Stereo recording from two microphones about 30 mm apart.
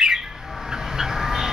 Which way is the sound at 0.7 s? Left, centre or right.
Centre.